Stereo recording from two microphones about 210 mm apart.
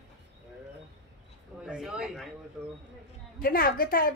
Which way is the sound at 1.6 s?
5° right (ahead or behind).